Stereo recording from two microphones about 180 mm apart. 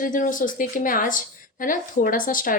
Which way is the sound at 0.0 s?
45° left (ahead or behind).